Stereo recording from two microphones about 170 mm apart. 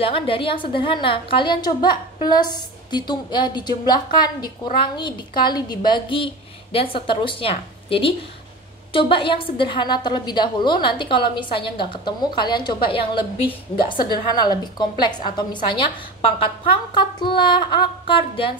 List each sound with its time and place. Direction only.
0.0 s a woman's voice: 35° left (ahead or behind)
16.9 s a woman's voice: 30° left (ahead or behind)